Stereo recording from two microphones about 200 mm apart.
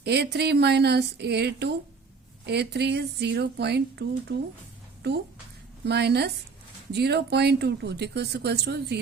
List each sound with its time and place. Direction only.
0.0 s speech: 55° right (ahead or behind)